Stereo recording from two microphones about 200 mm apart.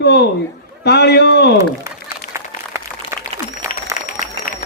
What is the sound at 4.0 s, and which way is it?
Applause, 40° left (ahead or behind).